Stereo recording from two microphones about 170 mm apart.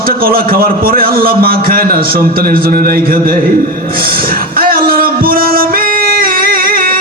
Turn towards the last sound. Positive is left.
turn(degrees=-60)  # may be behind; listen again after turning